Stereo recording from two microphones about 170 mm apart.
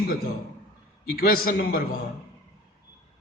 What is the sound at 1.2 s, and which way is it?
Speech, 60° left (ahead or behind).